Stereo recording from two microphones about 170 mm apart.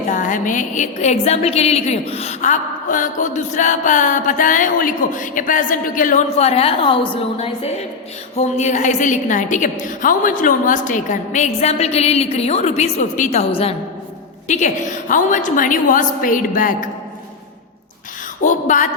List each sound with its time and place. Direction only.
0.1 s a woman's voice: 50° left (ahead or behind)
6.3 s a woman's voice: 35° left (ahead or behind)
13.5 s a woman's voice: 35° left (ahead or behind); by 16.9 s 55° left (ahead or behind)
18.4 s a woman's voice: 50° left (ahead or behind)